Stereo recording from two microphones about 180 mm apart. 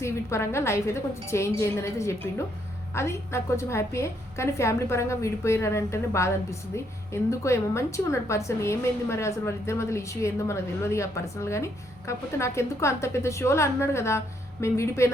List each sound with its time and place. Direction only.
0.0 s a woman's voice: 15° left (ahead or behind)